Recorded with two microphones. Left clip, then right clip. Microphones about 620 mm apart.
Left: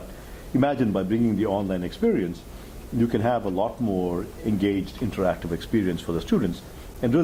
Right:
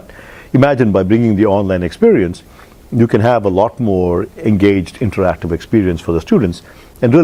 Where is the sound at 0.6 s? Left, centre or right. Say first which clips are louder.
Right 13 dB; right.